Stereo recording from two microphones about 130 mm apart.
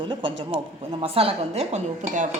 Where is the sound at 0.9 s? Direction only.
45° right (ahead or behind).